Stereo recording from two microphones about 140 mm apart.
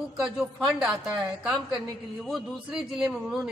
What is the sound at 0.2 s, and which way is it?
A man's voice, 5° right (ahead or behind).